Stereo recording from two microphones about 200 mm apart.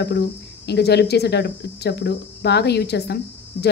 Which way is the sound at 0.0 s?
55° left (ahead or behind).